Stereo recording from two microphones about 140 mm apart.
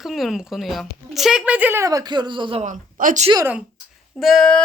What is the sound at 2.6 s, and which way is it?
Speech, 70° right (ahead or behind).